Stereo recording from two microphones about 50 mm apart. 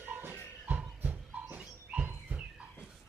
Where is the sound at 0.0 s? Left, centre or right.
Right.